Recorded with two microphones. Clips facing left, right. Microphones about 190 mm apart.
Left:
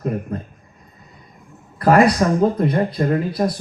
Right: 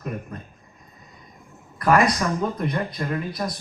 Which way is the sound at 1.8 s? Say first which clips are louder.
Left 6 dB; 30° left (ahead or behind).